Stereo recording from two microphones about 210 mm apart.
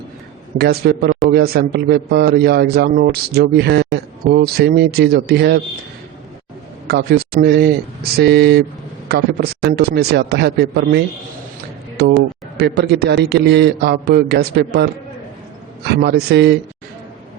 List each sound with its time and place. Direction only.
0.6 s speech: 45° right (ahead or behind)
6.8 s speech: 50° right (ahead or behind)
15.9 s speech: 50° right (ahead or behind)